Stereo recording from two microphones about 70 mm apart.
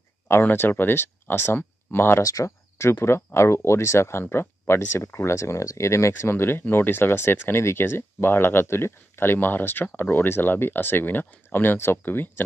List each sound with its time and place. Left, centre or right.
0.3 s speech: left
2.2 s speech: left